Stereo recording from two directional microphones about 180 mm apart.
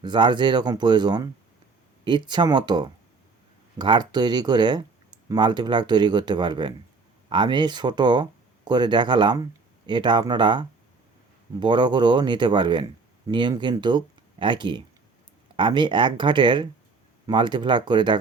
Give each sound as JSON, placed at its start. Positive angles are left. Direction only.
{"t": 0.0, "sound": "speech", "side_deg": -25}